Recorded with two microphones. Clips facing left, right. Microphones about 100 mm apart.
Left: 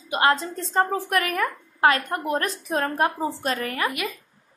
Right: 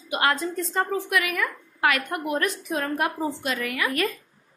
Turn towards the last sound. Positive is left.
turn(degrees=10)  # may be behind; listen again after turning